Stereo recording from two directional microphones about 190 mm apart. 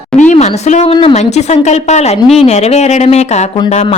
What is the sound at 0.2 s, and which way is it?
A woman's voice, 40° left (ahead or behind).